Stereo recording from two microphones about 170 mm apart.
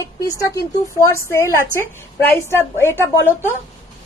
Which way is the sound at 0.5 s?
15° left (ahead or behind).